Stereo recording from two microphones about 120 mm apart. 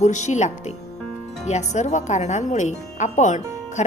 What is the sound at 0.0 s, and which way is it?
Speech, 80° left.